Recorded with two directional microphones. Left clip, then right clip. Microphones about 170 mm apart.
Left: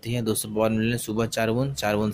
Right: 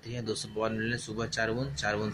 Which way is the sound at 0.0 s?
50° left (ahead or behind).